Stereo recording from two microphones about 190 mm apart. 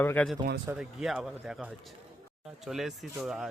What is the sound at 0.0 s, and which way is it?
Speech, 10° left (ahead or behind).